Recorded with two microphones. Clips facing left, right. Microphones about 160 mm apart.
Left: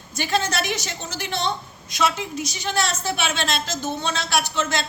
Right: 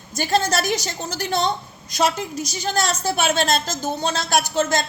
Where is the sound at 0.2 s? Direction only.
40° right (ahead or behind).